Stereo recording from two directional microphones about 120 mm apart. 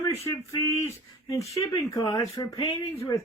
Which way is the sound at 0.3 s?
25° left (ahead or behind).